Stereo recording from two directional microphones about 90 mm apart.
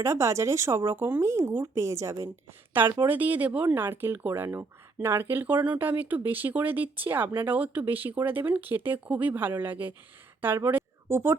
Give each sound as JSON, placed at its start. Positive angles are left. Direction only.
{"t": 0.0, "sound": "speech", "side_deg": -35}
{"t": 2.8, "sound": "speech", "side_deg": -20}